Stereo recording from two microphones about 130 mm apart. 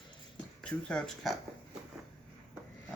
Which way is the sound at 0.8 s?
5° left (ahead or behind).